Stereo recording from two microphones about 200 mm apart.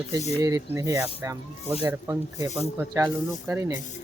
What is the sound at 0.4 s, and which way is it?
Speech, 15° right (ahead or behind).